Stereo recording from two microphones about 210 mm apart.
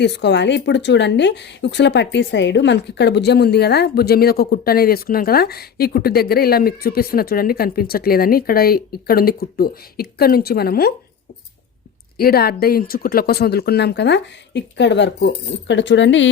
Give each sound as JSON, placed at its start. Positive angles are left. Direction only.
{"t": 0.0, "sound": "speech", "side_deg": 55}
{"t": 12.1, "sound": "speech", "side_deg": 45}